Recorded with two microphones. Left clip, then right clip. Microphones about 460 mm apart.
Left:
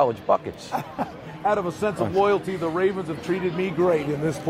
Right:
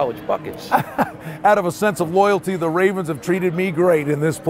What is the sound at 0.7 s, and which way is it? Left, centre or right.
Speech, right.